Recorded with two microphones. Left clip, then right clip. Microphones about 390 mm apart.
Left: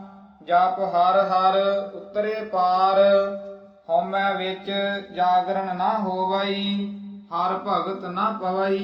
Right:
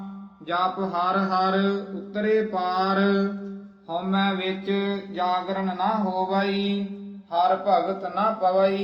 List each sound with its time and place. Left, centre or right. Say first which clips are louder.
0.4 s mantra: left 5 dB; right
2.1 s mantra: even; right
3.8 s mantra: left 4 dB; right; by 6.7 s centre
7.3 s speech: right 3 dB; left